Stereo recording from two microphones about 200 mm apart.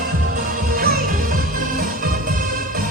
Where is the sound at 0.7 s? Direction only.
45° right (ahead or behind).